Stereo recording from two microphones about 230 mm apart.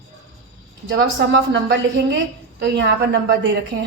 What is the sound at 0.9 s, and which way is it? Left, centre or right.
A woman's voice, right.